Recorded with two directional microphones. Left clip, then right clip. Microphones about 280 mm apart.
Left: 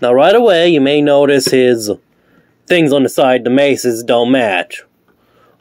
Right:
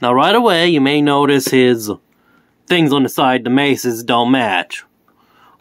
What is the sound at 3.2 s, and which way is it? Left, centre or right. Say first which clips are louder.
Speech: left 4 dB; centre.